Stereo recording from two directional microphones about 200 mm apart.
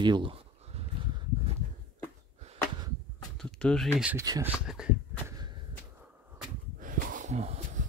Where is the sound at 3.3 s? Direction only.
5° left (ahead or behind).